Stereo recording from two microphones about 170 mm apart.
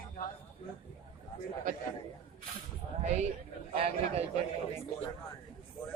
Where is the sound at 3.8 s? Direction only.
35° right (ahead or behind).